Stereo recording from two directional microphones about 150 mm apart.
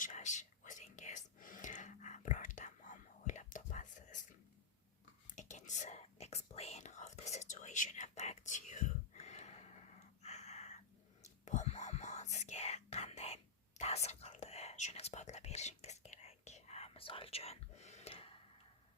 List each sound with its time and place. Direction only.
0.0 s whispering: 55° left (ahead or behind)
5.3 s whispering: 55° left (ahead or behind)